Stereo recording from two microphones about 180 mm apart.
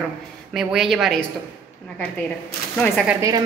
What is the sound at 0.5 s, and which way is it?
Speech, centre (ahead or behind).